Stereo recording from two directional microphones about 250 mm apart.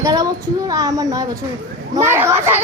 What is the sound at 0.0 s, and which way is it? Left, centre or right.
Child singing, centre.